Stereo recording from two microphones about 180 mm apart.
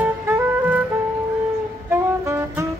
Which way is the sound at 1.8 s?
15° right (ahead or behind).